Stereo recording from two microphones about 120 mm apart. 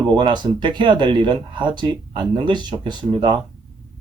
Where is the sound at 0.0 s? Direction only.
40° right (ahead or behind).